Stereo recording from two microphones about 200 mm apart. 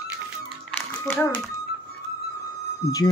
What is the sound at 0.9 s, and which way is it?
Speech, 10° left (ahead or behind).